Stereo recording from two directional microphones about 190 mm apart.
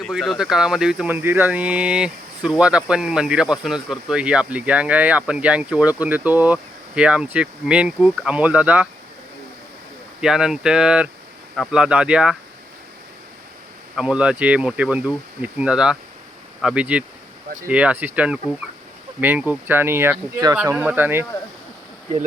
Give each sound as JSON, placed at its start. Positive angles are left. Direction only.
{"t": 0.0, "sound": "speech", "side_deg": 0}
{"t": 10.2, "sound": "speech", "side_deg": -5}
{"t": 13.9, "sound": "speech", "side_deg": -5}